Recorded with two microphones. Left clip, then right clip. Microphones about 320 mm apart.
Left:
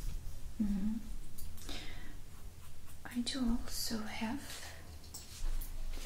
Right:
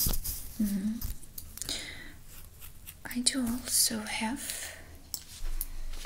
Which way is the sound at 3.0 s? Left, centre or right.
Right.